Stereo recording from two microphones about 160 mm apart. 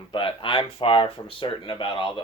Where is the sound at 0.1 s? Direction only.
30° left (ahead or behind).